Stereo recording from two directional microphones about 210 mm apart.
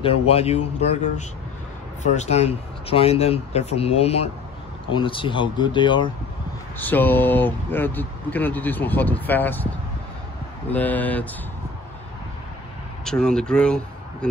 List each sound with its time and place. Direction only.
0.0 s speech: 30° left (ahead or behind)
2.1 s speech: 30° left (ahead or behind)
6.8 s speech: 10° left (ahead or behind)
10.7 s speech: 10° left (ahead or behind)
13.0 s speech: 5° left (ahead or behind)